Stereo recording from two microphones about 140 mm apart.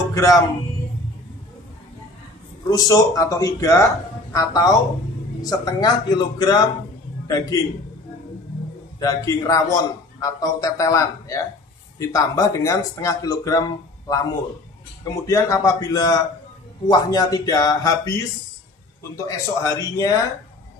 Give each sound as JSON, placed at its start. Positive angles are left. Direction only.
{"t": 0.1, "sound": "speech", "side_deg": 20}
{"t": 2.7, "sound": "a man's voice", "side_deg": 25}
{"t": 9.0, "sound": "a man's voice", "side_deg": 25}